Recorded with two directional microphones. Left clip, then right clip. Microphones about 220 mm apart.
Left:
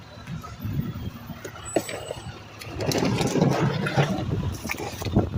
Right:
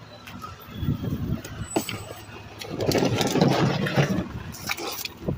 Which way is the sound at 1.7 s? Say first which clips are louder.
Left 1 dB; 45° right (ahead or behind).